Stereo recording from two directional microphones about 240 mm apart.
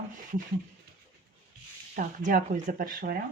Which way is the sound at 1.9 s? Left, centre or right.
Right.